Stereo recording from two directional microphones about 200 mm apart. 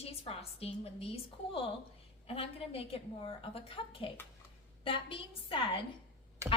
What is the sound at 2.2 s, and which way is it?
A woman's voice, 30° left (ahead or behind).